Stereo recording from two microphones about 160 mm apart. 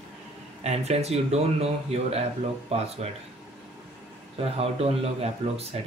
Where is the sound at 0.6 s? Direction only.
40° right (ahead or behind).